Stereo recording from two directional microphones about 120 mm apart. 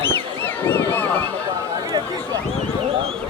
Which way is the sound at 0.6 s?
15° left (ahead or behind).